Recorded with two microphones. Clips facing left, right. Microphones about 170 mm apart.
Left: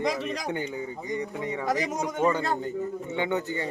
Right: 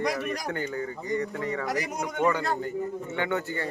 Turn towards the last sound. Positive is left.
turn(degrees=15)  # may be behind; listen again after turning